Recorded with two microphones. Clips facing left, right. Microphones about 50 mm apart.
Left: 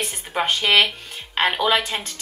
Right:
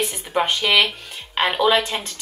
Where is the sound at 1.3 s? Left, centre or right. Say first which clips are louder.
Right 2 dB; centre.